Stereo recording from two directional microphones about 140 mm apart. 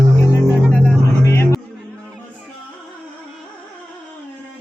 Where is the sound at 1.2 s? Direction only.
20° left (ahead or behind).